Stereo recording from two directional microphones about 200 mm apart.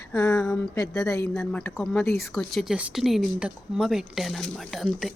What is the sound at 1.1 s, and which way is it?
A woman's voice, 15° left (ahead or behind).